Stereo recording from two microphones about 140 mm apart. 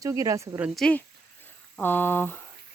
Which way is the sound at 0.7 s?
5° left (ahead or behind).